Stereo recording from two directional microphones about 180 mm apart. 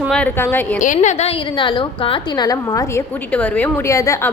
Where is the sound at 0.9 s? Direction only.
35° left (ahead or behind).